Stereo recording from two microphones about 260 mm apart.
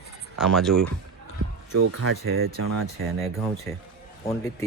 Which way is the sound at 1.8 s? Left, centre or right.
Right.